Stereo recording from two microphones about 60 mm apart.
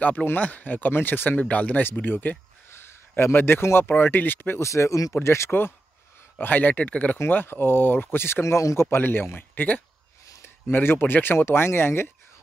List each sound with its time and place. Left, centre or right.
0.0 s speech: left
4.6 s speech: left
5.1 s speech: left
6.4 s speech: left
7.2 s speech: left
8.9 s speech: left
9.4 s speech: left
10.4 s speech: left